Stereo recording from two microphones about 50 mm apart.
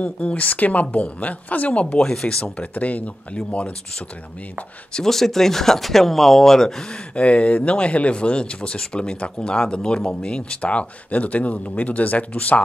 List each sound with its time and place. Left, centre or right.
0.0 s speech: left
2.0 s speech: centre
2.4 s speech: left
4.9 s speech: centre
7.2 s speech: left